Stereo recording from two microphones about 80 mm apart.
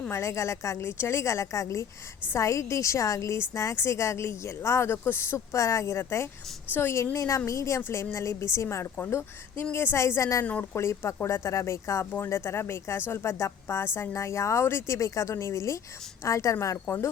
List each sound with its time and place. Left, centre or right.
0.1 s a woman's voice: left
10.4 s speech: centre
10.8 s a woman's voice: left
16.8 s a woman's voice: left